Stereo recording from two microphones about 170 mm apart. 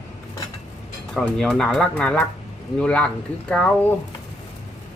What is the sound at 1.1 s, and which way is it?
Speech, 5° left (ahead or behind).